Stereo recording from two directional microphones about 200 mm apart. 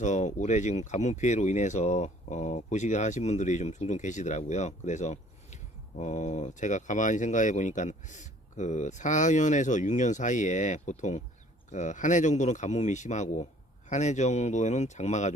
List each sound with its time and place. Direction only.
0.0 s speech: 35° left (ahead or behind)